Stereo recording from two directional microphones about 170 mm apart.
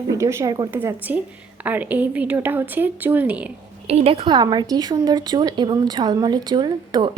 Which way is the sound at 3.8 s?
35° right (ahead or behind).